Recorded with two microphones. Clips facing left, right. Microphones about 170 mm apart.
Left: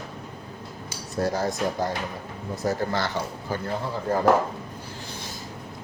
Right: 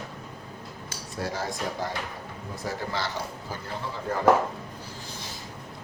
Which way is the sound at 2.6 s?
45° left (ahead or behind).